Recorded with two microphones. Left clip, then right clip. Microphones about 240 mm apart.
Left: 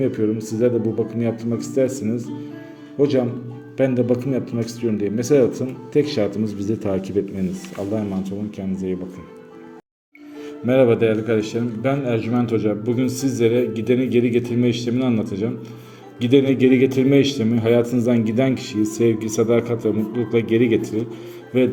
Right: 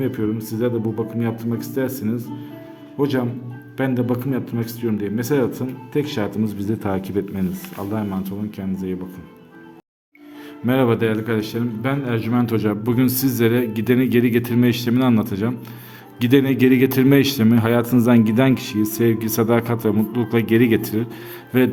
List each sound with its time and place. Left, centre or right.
0.0 s a man's voice: centre
10.7 s a man's voice: centre
16.5 s a man's voice: right